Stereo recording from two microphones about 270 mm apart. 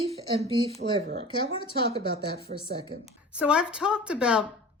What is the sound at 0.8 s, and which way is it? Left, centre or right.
Speech, right.